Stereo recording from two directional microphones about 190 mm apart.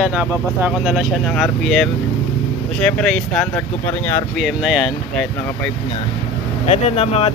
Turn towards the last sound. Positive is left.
turn(degrees=35)  # may be behind; listen again after turning